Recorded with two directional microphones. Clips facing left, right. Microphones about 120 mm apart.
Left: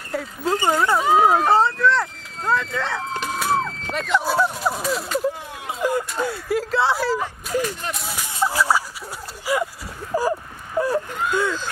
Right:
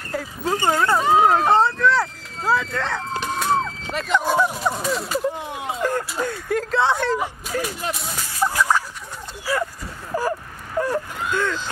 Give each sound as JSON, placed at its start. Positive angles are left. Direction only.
{"t": 0.1, "sound": "speech", "side_deg": 0}
{"t": 5.8, "sound": "a sound", "side_deg": 10}
{"t": 6.1, "sound": "speech", "side_deg": 5}
{"t": 8.5, "sound": "fowl", "side_deg": 10}
{"t": 9.5, "sound": "speech", "side_deg": 15}
{"t": 10.1, "sound": "a sound", "side_deg": 10}
{"t": 10.8, "sound": "wail", "side_deg": 10}
{"t": 11.3, "sound": "speech", "side_deg": 10}